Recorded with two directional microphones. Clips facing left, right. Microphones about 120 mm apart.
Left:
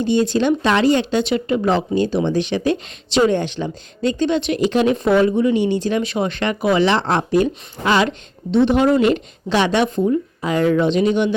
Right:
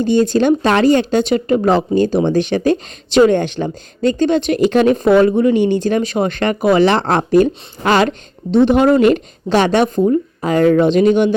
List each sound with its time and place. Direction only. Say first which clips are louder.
0.0 s speech: right 4 dB; 45° right (ahead or behind)